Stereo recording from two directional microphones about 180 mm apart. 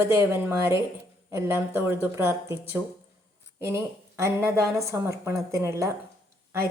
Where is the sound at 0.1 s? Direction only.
10° right (ahead or behind).